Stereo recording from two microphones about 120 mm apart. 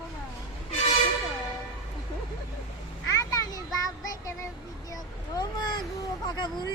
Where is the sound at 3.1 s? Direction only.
30° left (ahead or behind).